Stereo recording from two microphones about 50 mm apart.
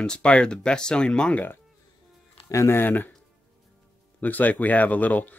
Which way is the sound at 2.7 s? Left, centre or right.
Left.